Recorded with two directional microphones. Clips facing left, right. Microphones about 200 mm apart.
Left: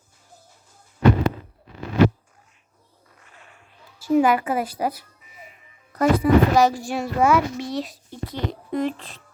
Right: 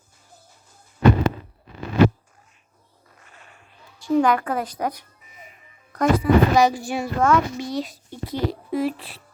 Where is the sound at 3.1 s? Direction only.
45° right (ahead or behind).